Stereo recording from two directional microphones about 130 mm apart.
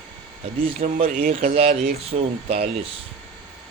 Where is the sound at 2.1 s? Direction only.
90° right.